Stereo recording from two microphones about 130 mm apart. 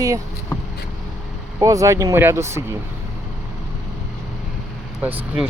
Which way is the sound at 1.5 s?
25° right (ahead or behind).